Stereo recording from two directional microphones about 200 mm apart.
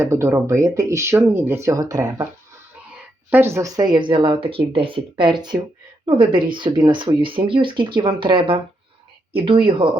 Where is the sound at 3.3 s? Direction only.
10° right (ahead or behind).